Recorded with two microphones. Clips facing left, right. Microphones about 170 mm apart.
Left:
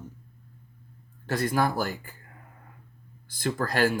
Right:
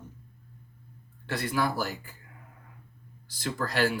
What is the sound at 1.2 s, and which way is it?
Speech, 45° left (ahead or behind).